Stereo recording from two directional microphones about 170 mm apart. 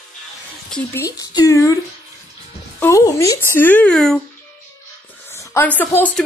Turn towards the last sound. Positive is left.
turn(degrees=10)  # may be behind; listen again after turning